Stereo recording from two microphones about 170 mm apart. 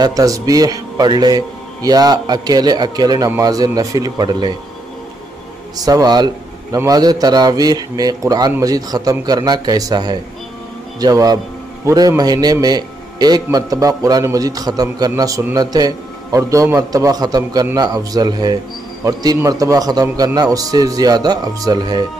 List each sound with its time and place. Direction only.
0.0 s a man's voice: 20° right (ahead or behind)
5.9 s a man's voice: 20° right (ahead or behind)